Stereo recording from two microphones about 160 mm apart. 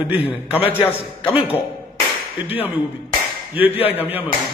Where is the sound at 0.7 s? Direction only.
15° left (ahead or behind).